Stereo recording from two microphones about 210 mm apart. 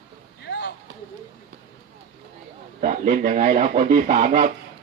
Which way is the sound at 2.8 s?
40° right (ahead or behind).